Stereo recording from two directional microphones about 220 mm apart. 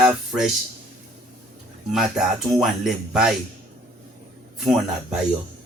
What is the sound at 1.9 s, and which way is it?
Speech, centre (ahead or behind).